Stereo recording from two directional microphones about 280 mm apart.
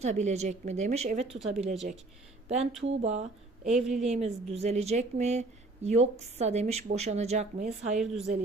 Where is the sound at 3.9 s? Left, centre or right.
Right.